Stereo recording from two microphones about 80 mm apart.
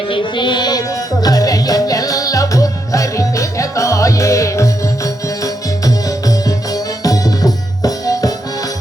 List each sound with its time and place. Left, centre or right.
0.1 s music: left